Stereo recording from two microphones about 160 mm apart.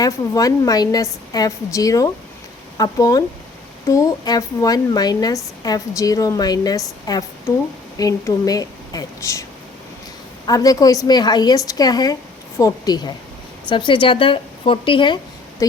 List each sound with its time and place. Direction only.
0.0 s speech: 20° left (ahead or behind)